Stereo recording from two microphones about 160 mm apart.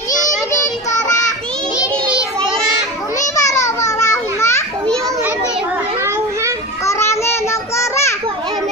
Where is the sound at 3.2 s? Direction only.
20° left (ahead or behind).